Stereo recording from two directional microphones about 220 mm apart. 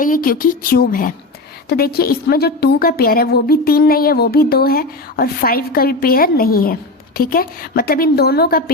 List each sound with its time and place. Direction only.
0.0 s a woman's voice: 40° left (ahead or behind)